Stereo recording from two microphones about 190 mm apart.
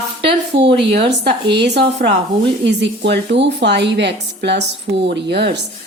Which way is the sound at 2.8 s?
65° right (ahead or behind).